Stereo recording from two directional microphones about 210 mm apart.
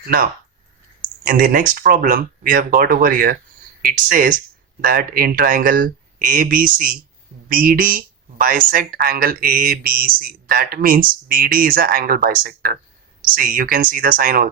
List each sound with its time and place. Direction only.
1.2 s speech: 40° right (ahead or behind)